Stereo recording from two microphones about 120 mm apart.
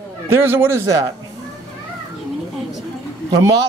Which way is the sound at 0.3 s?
20° right (ahead or behind).